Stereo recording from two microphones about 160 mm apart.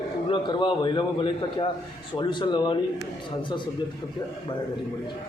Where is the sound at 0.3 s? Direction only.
30° left (ahead or behind).